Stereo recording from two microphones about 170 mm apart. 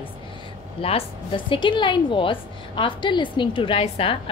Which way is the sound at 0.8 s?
30° left (ahead or behind).